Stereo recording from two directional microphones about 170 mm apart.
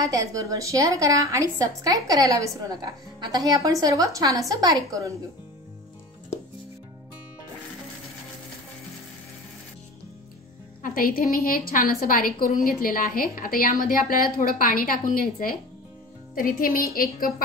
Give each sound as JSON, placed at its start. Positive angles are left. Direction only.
{"t": 0.0, "sound": "a woman's voice", "side_deg": -20}
{"t": 10.8, "sound": "a woman's voice", "side_deg": 55}